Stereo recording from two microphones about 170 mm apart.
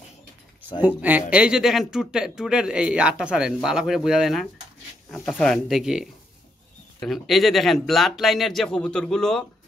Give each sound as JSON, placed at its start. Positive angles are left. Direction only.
{"t": 0.8, "sound": "speech", "side_deg": -10}